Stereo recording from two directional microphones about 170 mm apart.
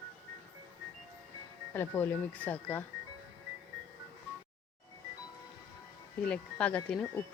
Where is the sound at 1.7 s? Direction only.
15° left (ahead or behind).